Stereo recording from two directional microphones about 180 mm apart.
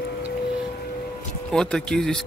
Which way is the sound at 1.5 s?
5° left (ahead or behind).